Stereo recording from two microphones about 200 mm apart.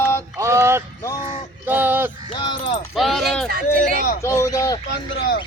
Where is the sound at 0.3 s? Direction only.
15° right (ahead or behind).